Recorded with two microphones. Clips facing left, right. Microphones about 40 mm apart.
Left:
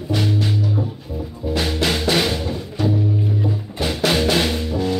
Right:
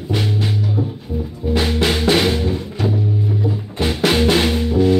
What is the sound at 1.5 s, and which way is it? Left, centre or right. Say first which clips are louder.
Music: right 3 dB; right.